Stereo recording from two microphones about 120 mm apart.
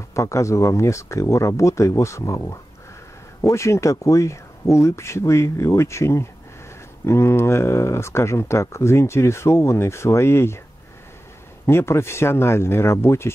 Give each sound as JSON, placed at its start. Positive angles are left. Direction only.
{"t": 0.1, "sound": "speech", "side_deg": 25}
{"t": 11.6, "sound": "speech", "side_deg": 20}